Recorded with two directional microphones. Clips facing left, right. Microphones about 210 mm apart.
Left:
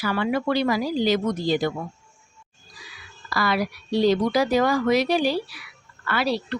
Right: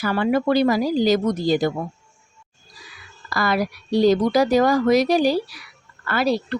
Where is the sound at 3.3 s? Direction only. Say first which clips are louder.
Right 2 dB; 45° right (ahead or behind).